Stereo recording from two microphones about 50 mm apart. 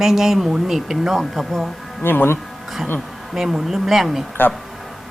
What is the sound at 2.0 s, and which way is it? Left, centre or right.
Speech, left.